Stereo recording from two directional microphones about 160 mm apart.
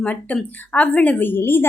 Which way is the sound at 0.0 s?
10° left (ahead or behind).